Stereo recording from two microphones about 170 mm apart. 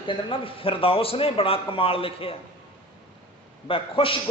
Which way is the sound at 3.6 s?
30° left (ahead or behind).